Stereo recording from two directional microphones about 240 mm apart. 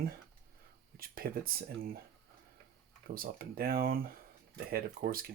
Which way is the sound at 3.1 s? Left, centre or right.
Right.